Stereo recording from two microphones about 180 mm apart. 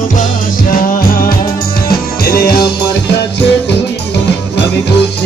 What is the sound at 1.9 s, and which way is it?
Music, 55° left (ahead or behind).